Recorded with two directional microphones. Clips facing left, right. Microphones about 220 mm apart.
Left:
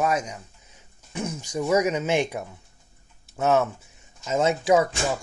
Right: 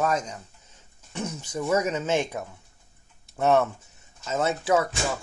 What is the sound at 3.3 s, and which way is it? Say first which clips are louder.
Speech: even; centre (ahead or behind).